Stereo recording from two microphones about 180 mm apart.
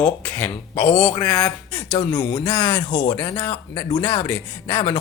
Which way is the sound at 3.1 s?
20° left (ahead or behind).